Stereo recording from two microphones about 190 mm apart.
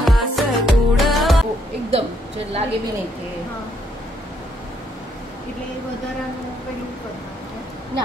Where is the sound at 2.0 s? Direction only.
30° right (ahead or behind).